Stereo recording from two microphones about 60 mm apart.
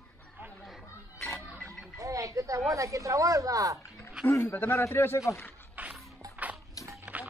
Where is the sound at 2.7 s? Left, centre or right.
Right.